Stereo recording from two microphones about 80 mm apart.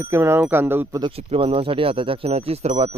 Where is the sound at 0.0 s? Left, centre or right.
Right.